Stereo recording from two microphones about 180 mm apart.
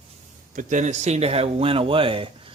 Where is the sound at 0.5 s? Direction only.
45° right (ahead or behind).